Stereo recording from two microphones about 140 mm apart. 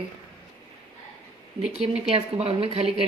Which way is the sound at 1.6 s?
40° right (ahead or behind).